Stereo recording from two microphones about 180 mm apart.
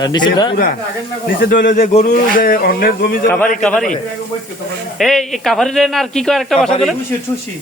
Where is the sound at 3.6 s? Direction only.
5° left (ahead or behind).